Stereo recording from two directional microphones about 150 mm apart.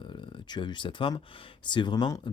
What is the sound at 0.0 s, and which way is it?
Speech, 35° left (ahead or behind).